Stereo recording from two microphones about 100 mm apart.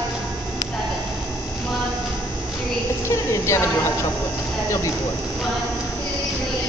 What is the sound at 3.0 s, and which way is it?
Speech, 30° left (ahead or behind).